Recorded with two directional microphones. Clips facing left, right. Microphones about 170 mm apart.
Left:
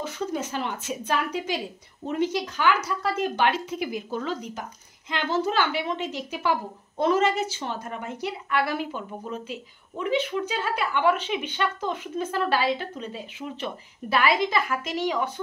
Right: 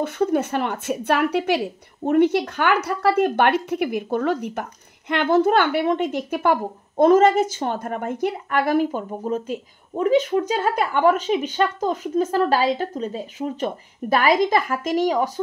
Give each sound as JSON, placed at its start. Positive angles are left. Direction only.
{"t": 0.0, "sound": "a woman's voice", "side_deg": -55}